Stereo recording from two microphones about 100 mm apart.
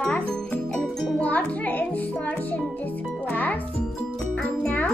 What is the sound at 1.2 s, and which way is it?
Music, 15° left (ahead or behind).